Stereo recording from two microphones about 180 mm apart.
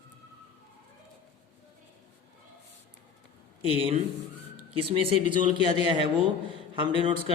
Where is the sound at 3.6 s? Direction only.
30° right (ahead or behind).